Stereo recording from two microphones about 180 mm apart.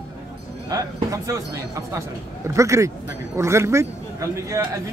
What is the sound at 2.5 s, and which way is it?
A man's voice, 15° right (ahead or behind).